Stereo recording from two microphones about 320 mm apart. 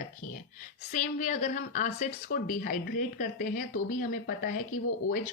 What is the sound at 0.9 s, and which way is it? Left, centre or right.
Speech, left.